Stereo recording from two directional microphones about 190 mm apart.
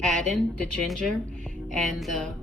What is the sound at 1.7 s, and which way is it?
Speech, centre (ahead or behind).